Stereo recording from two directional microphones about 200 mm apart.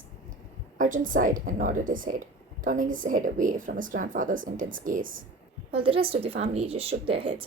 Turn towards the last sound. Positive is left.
turn(degrees=-25)  # may be behind; listen again after turning